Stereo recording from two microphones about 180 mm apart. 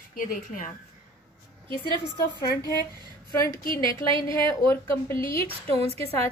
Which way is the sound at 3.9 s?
15° left (ahead or behind).